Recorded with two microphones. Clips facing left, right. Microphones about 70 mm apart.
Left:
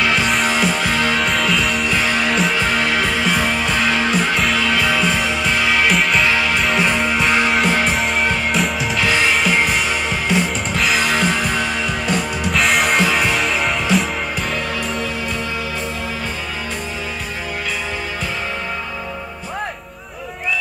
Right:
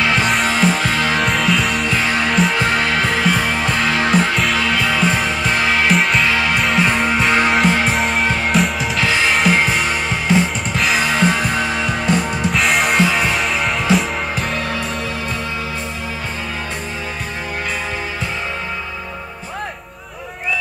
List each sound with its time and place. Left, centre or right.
0.2 s music: centre
5.5 s music: right
5.8 s music: centre
11.1 s music: centre